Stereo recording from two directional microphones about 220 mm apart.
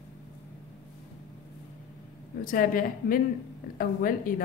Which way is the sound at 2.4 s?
40° left (ahead or behind).